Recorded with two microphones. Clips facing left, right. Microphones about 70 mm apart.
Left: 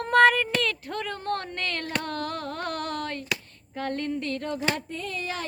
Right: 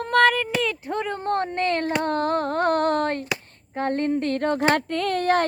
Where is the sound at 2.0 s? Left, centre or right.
Right.